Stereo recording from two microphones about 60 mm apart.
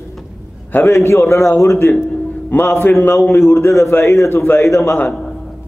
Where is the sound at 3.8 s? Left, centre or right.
Left.